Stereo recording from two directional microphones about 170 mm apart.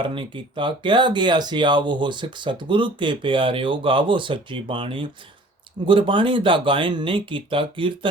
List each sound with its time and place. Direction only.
0.0 s speech: 30° right (ahead or behind)